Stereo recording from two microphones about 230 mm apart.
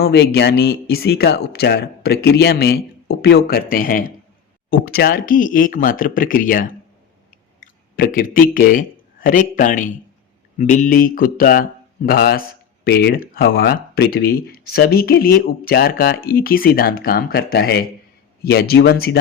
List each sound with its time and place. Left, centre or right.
0.0 s speech: left
7.9 s a man's voice: left